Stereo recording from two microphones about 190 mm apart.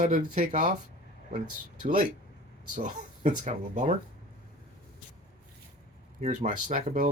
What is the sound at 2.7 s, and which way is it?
Speech, 40° right (ahead or behind).